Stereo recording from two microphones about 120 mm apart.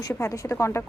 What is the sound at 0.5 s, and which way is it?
Speech, 20° left (ahead or behind).